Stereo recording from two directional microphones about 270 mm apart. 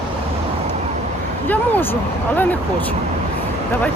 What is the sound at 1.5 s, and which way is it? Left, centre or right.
Speech, centre.